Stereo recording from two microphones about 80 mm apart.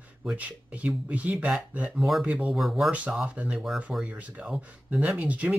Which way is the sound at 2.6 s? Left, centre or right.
Centre.